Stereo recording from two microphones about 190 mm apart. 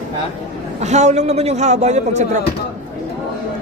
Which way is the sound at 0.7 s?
35° right (ahead or behind).